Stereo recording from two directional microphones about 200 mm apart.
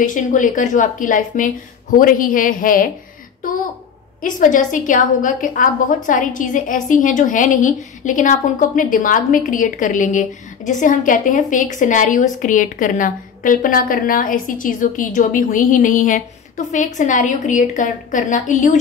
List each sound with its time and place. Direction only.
0.0 s a woman's voice: 40° left (ahead or behind)
4.2 s a woman's voice: 40° left (ahead or behind)